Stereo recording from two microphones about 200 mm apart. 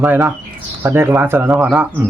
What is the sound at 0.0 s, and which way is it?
A man's voice, 10° right (ahead or behind).